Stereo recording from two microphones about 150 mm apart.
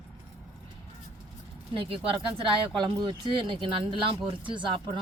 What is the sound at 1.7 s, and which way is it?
Speech, 35° right (ahead or behind).